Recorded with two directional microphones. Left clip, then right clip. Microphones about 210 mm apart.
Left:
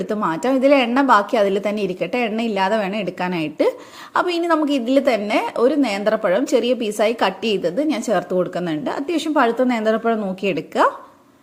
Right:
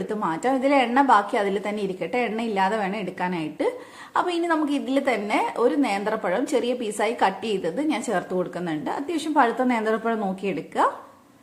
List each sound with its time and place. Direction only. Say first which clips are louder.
0.1 s a woman's voice: left 4 dB; 25° left (ahead or behind)